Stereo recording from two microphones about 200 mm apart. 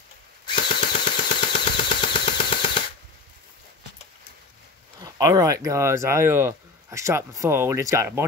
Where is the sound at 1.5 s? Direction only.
25° left (ahead or behind).